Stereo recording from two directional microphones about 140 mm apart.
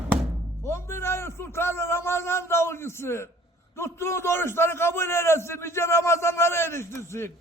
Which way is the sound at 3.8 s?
20° left (ahead or behind).